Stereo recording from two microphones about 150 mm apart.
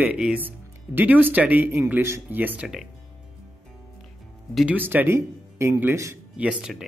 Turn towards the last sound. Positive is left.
turn(degrees=-5)  # may be behind; listen again after turning